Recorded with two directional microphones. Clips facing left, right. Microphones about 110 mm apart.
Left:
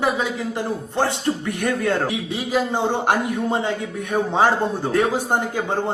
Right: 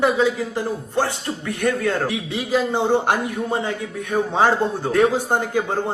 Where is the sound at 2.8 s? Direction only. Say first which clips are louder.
Right 3 dB; 15° right (ahead or behind).